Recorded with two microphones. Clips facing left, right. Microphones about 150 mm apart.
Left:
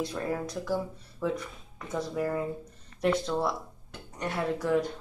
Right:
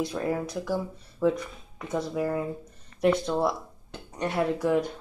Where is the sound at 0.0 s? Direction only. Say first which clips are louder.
Right 3 dB; 15° right (ahead or behind).